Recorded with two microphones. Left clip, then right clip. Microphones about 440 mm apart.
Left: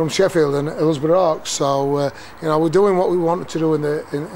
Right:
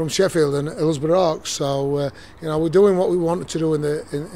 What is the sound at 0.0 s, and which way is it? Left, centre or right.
Speech, right.